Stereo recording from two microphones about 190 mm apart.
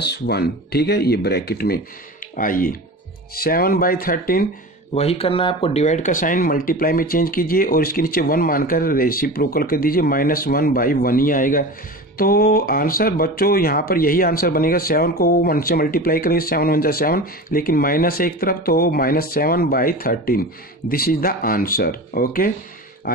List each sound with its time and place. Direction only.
0.0 s speech: 60° left (ahead or behind)
4.9 s speech: 30° left (ahead or behind); by 22.5 s 50° left (ahead or behind)